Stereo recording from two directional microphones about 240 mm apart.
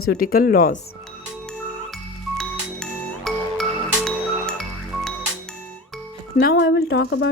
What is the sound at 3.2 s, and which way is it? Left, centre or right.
Music, centre.